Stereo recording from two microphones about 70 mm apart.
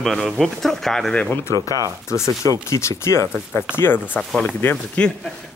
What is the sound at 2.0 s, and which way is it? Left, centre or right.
Speech, left.